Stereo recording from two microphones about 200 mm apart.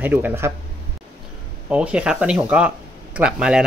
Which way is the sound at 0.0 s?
10° right (ahead or behind).